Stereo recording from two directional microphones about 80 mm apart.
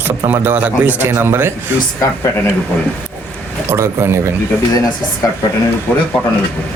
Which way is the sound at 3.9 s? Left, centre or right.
Right.